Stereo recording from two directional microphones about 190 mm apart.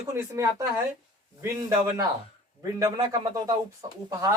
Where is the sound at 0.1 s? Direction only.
15° right (ahead or behind).